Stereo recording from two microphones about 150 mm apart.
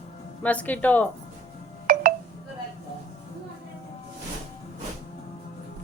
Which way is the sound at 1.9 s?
75° right (ahead or behind).